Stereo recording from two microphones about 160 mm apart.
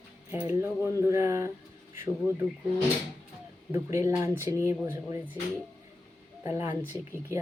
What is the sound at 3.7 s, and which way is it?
Speech, 20° right (ahead or behind).